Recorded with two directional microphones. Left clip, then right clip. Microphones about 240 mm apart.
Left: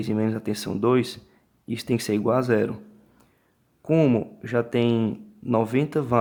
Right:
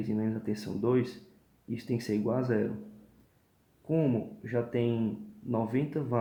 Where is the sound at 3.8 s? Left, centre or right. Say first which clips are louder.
Left 9 dB; left.